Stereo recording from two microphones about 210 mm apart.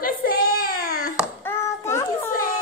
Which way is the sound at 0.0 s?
45° left (ahead or behind).